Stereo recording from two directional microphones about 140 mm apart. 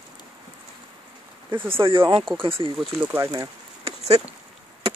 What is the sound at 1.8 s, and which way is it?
Speech, 40° right (ahead or behind).